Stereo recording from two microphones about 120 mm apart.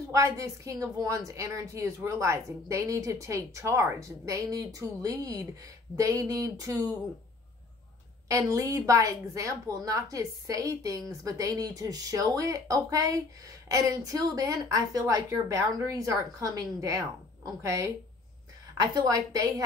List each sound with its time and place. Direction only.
0.1 s a woman's voice: 25° right (ahead or behind)
8.3 s a woman's voice: 25° right (ahead or behind)